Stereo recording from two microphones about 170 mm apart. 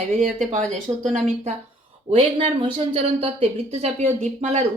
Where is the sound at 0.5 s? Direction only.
45° right (ahead or behind).